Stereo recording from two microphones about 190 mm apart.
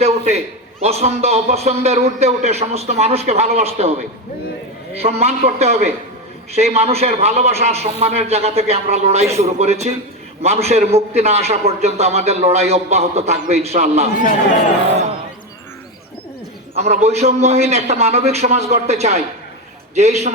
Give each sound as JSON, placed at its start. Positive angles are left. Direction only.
{"t": 0.0, "sound": "a man's voice", "side_deg": -35}
{"t": 4.9, "sound": "a man's voice", "side_deg": -35}
{"t": 16.7, "sound": "a man's voice", "side_deg": -35}